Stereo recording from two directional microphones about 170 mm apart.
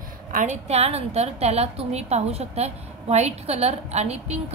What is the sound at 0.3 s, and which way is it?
A woman's voice, 45° right (ahead or behind).